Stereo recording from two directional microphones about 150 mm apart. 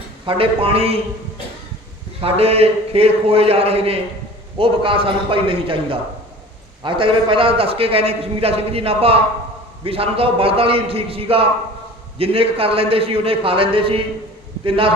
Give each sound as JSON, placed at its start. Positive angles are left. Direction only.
{"t": 0.3, "sound": "a man's voice", "side_deg": -40}
{"t": 2.2, "sound": "a man's voice", "side_deg": -40}